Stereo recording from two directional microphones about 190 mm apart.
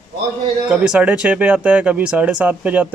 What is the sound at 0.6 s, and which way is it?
Speech, 5° right (ahead or behind).